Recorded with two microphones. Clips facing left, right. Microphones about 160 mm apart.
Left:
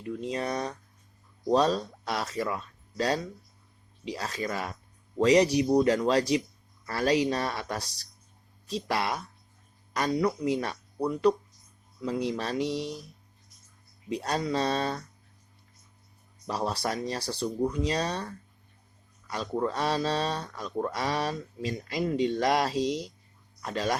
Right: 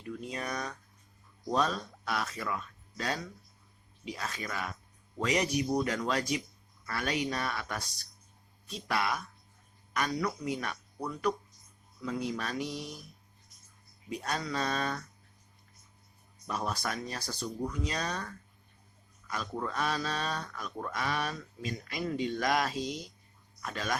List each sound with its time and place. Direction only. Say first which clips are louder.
0.0 s a sound: left 6 dB; 30° left (ahead or behind)
1.5 s speech: left 7 dB; 30° left (ahead or behind)
12.6 s speech: left 8 dB; 85° left
14.1 s speech: left 6 dB; 30° left (ahead or behind)
16.5 s speech: left 5 dB; 30° left (ahead or behind)